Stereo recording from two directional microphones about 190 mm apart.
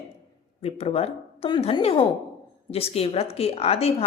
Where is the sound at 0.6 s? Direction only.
30° left (ahead or behind).